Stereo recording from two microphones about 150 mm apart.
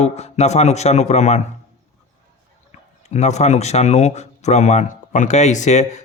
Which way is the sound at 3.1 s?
50° left (ahead or behind).